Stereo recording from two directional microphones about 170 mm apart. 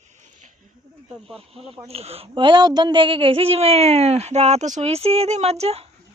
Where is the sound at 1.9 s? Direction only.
35° right (ahead or behind).